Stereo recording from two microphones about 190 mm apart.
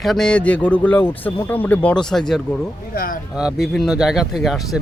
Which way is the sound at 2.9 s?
50° left (ahead or behind).